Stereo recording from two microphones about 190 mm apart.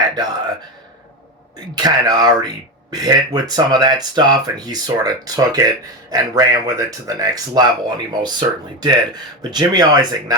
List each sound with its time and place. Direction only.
1.7 s speech: 20° right (ahead or behind)